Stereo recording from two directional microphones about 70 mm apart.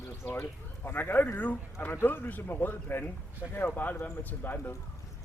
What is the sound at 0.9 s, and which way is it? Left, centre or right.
A man's voice, left.